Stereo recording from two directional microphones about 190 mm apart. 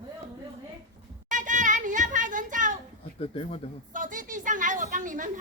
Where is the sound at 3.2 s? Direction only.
30° left (ahead or behind).